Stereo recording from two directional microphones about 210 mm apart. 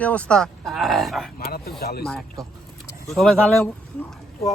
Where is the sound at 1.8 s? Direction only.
50° left (ahead or behind).